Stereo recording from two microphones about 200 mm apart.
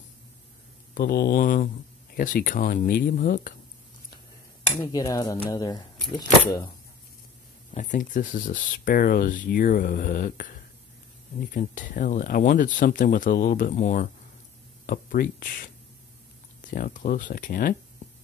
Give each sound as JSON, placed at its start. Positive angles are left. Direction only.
{"t": 0.9, "sound": "speech", "side_deg": 55}
{"t": 4.8, "sound": "speech", "side_deg": 20}
{"t": 7.7, "sound": "speech", "side_deg": 40}
{"t": 16.7, "sound": "speech", "side_deg": 40}